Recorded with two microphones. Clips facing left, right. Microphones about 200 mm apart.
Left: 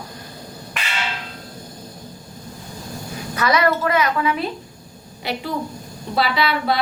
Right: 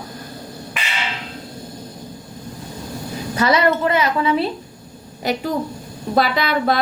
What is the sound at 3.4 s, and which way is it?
A woman's voice, 30° right (ahead or behind).